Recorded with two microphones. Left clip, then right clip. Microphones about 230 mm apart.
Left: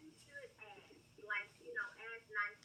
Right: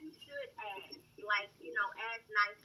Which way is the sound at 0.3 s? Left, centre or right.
Right.